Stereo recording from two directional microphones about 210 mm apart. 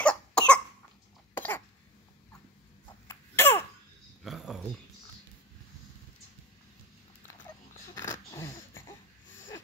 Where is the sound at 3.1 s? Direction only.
10° left (ahead or behind).